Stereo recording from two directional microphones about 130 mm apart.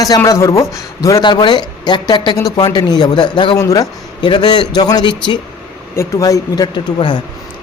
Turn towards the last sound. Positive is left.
turn(degrees=35)  # may be behind; listen again after turning